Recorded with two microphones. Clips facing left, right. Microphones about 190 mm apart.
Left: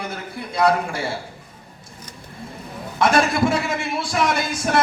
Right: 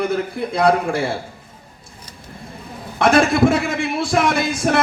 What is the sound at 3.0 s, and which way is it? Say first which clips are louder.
A man's voice: right 4 dB; 55° right (ahead or behind).